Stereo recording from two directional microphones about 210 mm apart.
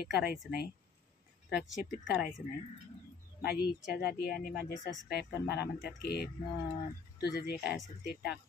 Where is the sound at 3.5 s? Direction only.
45° left (ahead or behind).